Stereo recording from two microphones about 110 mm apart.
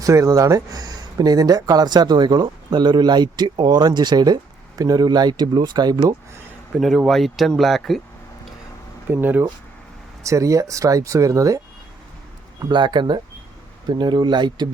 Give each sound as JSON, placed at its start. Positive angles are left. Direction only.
{"t": 0.0, "sound": "speech", "side_deg": -30}
{"t": 6.7, "sound": "speech", "side_deg": 0}
{"t": 9.0, "sound": "speech", "side_deg": -15}
{"t": 10.2, "sound": "speech", "side_deg": -30}
{"t": 12.7, "sound": "speech", "side_deg": -45}